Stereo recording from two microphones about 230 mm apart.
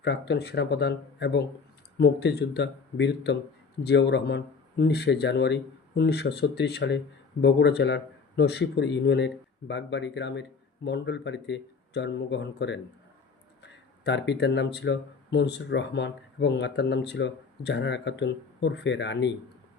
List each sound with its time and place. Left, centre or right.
0.0 s speech: left